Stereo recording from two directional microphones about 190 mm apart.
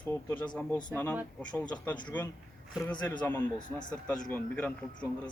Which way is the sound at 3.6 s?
45° left (ahead or behind).